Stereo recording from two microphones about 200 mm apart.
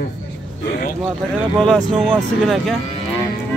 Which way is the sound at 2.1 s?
Centre (ahead or behind).